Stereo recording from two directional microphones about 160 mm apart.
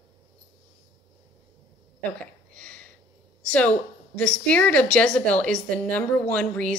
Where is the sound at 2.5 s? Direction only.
5° left (ahead or behind).